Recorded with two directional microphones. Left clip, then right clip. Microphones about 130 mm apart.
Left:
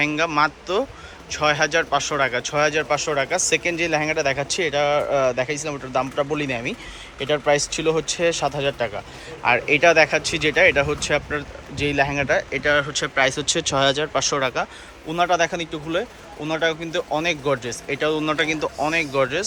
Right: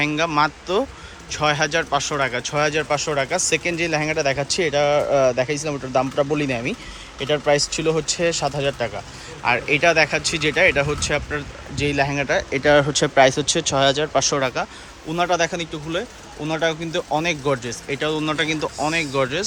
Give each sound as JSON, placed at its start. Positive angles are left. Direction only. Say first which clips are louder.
{"t": 0.0, "sound": "speech", "louder": "even", "side_deg": -15}
{"t": 13.2, "sound": "speech", "louder": "right 3 dB", "side_deg": -20}
{"t": 16.4, "sound": "speech", "louder": "even", "side_deg": -20}